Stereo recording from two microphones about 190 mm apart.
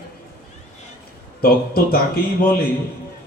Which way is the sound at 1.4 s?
50° left (ahead or behind).